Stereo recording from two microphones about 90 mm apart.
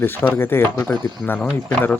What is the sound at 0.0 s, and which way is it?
Speech, 25° left (ahead or behind).